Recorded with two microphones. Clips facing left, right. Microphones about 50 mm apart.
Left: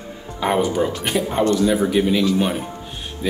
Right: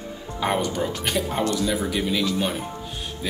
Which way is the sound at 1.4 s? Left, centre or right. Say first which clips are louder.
Left 9 dB; left.